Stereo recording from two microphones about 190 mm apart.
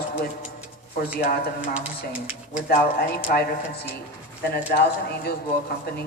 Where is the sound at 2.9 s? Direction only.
55° left (ahead or behind).